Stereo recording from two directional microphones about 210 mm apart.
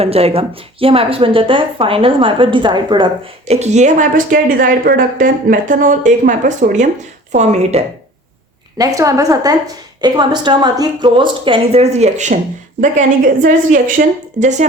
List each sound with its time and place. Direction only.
0.0 s speech: 30° right (ahead or behind)
3.5 s a woman's voice: 35° right (ahead or behind)
9.0 s a woman's voice: 15° right (ahead or behind); by 14.7 s 35° right (ahead or behind)